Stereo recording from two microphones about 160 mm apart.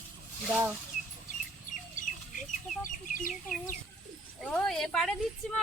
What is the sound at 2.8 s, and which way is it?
Speech, 55° left (ahead or behind).